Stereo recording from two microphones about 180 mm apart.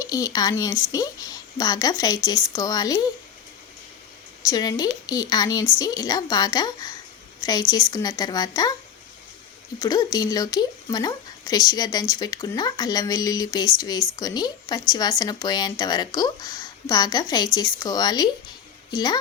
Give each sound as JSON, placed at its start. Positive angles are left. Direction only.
{"t": 0.0, "sound": "speech", "side_deg": 20}
{"t": 4.4, "sound": "speech", "side_deg": 20}
{"t": 9.8, "sound": "speech", "side_deg": 20}